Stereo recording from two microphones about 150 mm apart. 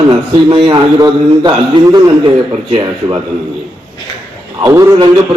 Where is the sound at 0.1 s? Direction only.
30° right (ahead or behind).